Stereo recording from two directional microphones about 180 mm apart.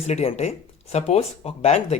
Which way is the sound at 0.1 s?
35° left (ahead or behind).